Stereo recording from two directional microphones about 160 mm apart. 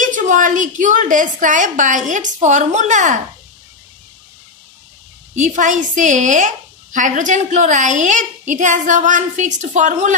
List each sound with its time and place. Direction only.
0.0 s a woman's voice: 55° right (ahead or behind)
5.3 s a woman's voice: 50° right (ahead or behind)